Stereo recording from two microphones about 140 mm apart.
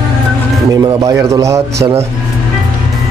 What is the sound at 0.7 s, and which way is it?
Speech, 25° right (ahead or behind).